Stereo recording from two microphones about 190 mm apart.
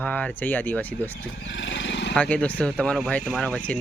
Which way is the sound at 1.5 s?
75° left (ahead or behind).